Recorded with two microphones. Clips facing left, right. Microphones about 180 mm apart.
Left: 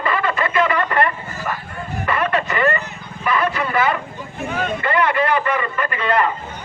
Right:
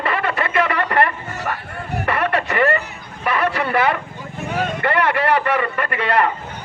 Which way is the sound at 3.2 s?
65° right (ahead or behind).